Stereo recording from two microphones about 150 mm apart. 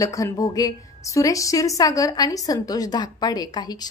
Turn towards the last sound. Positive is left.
turn(degrees=25)  # may be behind; listen again after turning